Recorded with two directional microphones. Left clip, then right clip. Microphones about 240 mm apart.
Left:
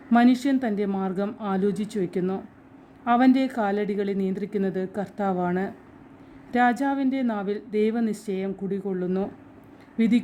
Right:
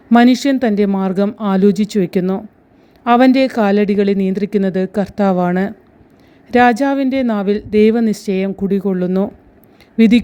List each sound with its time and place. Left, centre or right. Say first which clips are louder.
0.1 s speech: right 9 dB; right